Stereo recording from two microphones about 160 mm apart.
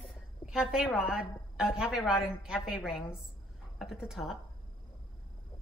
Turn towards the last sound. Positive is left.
turn(degrees=0)  # may be behind; listen again after turning